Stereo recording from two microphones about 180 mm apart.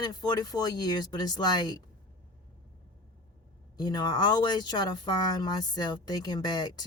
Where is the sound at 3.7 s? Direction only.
20° left (ahead or behind).